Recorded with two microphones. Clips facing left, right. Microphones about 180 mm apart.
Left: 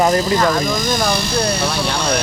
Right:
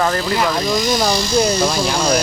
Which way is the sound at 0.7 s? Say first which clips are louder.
Right 1 dB; 50° left (ahead or behind).